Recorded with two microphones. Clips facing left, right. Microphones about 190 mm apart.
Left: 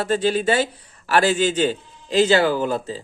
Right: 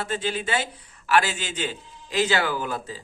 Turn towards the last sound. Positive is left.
turn(degrees=30)  # may be behind; listen again after turning